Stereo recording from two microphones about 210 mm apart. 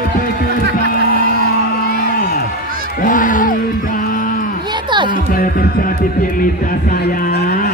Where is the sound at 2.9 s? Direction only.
40° left (ahead or behind).